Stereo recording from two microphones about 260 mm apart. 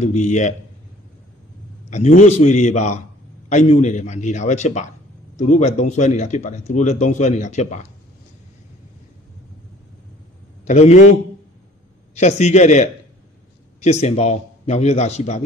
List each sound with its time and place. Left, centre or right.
0.0 s a man's voice: left
1.9 s a man's voice: left
10.6 s a man's voice: left
12.2 s a man's voice: left